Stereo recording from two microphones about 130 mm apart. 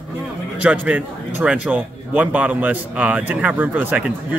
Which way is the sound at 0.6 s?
10° right (ahead or behind).